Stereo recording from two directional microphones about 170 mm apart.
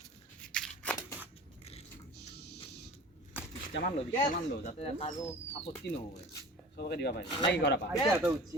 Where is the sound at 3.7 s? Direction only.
90° left.